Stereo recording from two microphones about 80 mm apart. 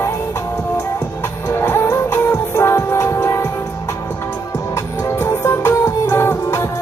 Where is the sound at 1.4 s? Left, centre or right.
Left.